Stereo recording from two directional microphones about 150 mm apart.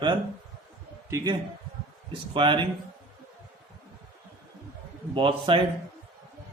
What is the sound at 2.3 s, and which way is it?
Mantra, 30° right (ahead or behind).